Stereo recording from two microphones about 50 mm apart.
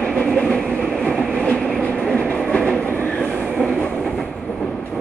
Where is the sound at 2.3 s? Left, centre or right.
Left.